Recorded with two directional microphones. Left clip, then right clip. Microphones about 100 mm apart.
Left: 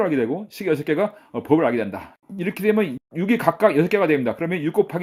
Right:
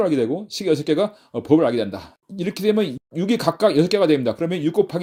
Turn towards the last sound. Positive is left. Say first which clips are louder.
# right 1 dB
turn(degrees=-30)  # may be behind; listen again after turning